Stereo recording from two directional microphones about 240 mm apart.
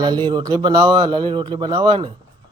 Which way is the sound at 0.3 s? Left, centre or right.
Centre.